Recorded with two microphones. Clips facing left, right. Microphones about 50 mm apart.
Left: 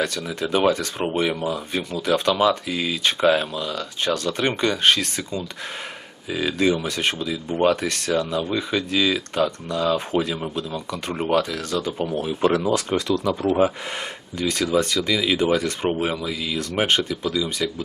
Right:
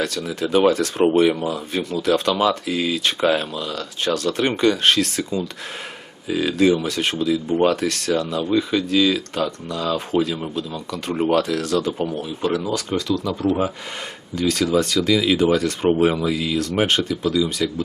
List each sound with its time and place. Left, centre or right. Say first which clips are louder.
0.0 s speech: right 1 dB; centre
7.2 s speech: right 7 dB; centre
12.1 s speech: left 2 dB; left; by 17.8 s centre